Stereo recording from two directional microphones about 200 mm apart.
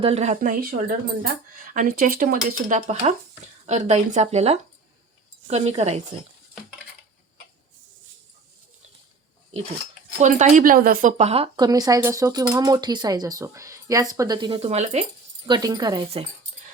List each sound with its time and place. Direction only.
0.0 s speech: 30° right (ahead or behind)
10.2 s speech: 35° right (ahead or behind)
15.4 s speech: 20° right (ahead or behind)